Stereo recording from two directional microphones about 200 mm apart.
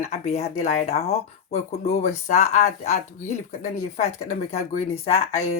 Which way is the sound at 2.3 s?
35° left (ahead or behind).